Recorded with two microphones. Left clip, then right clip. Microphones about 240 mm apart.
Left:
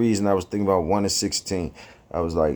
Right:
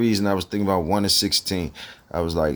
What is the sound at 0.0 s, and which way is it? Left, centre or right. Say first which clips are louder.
Speech: left 1 dB; right.